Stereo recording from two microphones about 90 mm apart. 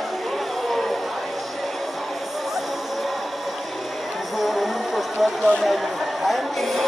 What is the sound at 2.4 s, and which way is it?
Music, centre (ahead or behind).